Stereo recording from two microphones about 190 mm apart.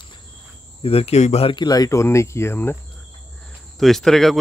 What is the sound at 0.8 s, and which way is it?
Speech, 30° left (ahead or behind).